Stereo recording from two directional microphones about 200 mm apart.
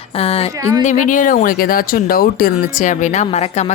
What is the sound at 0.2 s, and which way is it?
Speech, 30° left (ahead or behind).